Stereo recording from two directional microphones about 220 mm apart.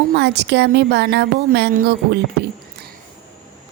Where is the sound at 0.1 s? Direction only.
50° right (ahead or behind).